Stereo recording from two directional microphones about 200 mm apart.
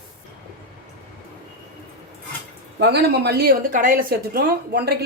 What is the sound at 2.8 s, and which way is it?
A woman's voice, 55° right (ahead or behind).